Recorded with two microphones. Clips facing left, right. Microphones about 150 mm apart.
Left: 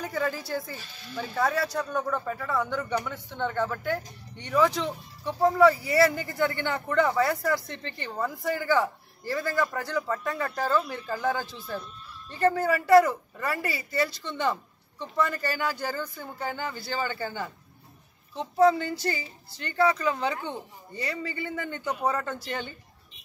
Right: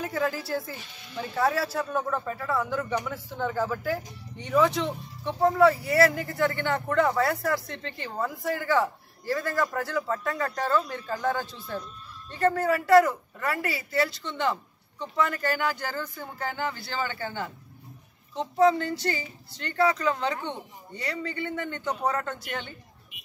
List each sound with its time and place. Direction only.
0.0 s speech: centre (ahead or behind)
18.6 s speech: centre (ahead or behind)